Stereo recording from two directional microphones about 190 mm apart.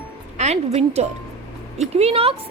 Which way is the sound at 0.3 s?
35° right (ahead or behind).